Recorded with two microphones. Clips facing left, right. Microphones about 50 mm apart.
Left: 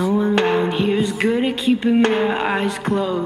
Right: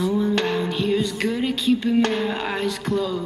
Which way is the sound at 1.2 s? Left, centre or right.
Left.